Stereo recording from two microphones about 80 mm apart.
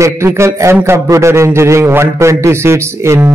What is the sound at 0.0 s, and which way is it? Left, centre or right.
A man's voice, right.